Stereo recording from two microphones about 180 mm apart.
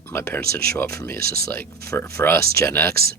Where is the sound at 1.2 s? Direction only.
60° right (ahead or behind).